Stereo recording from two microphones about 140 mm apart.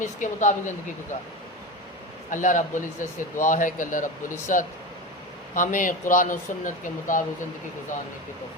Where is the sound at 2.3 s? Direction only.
65° left (ahead or behind).